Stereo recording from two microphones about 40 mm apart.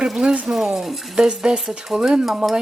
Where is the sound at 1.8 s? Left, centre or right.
Centre.